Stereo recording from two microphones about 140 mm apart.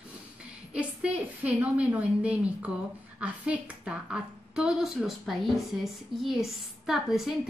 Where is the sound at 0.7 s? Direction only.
10° right (ahead or behind).